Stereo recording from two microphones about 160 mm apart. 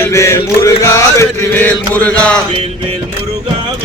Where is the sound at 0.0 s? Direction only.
20° left (ahead or behind).